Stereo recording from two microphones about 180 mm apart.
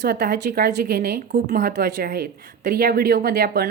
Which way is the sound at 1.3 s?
50° right (ahead or behind).